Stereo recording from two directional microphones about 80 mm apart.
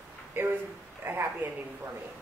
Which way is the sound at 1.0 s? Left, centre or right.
Right.